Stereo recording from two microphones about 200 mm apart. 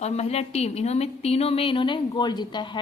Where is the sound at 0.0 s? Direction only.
35° left (ahead or behind).